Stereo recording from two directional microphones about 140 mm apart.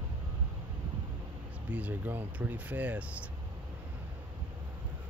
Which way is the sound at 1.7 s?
10° right (ahead or behind).